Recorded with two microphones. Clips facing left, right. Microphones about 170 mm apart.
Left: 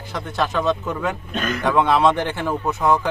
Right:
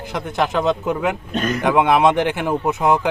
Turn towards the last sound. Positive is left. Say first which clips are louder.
# right 2 dB
turn(degrees=-20)  # may be behind; listen again after turning